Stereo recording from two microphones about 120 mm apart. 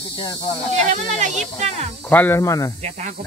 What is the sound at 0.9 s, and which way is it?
Speech, 85° right.